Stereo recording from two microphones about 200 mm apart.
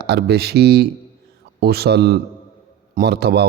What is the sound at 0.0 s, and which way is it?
Speech, 55° right (ahead or behind).